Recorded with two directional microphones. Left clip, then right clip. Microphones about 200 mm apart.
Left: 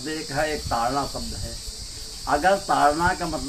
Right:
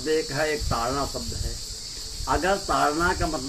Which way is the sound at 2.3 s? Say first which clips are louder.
Left 4 dB; 15° left (ahead or behind).